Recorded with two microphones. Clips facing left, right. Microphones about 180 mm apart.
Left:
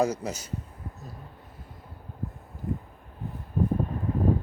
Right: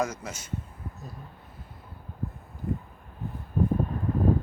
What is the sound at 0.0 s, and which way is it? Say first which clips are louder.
Speech: left 4 dB; 35° left (ahead or behind).